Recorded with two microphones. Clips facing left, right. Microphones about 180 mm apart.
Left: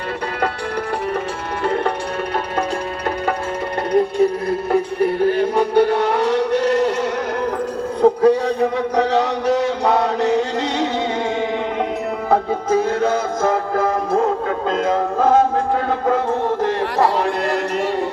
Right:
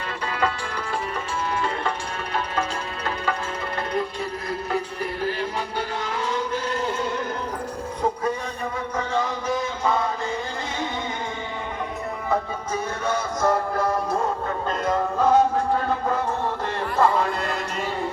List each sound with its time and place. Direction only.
1.6 s music: 60° left (ahead or behind)
3.9 s music: 50° left (ahead or behind); by 7.1 s 75° left (ahead or behind)
8.0 s a sound: 70° left (ahead or behind)
12.3 s music: 80° left
14.7 s music: 90° left
15.2 s music: 50° left (ahead or behind)
16.6 s a sound: 80° left